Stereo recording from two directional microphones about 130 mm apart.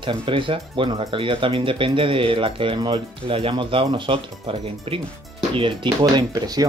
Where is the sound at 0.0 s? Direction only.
40° right (ahead or behind).